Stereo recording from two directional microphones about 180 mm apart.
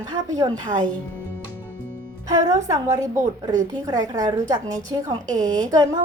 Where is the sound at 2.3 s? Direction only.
20° right (ahead or behind).